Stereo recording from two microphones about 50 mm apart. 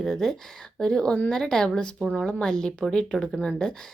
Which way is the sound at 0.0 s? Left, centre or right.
Centre.